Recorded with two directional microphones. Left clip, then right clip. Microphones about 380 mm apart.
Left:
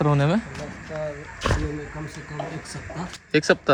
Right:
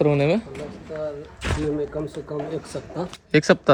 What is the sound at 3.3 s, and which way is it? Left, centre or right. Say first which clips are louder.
Speech: right 2 dB; centre.